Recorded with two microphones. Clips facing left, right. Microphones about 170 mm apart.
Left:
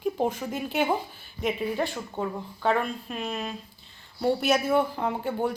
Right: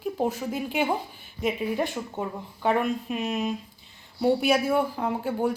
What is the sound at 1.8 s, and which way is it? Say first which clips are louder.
Speech: even; 15° right (ahead or behind).